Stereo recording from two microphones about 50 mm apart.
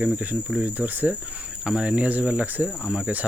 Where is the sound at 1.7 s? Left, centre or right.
Right.